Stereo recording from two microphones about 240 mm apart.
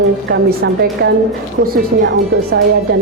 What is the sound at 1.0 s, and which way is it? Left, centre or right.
A woman's voice, right.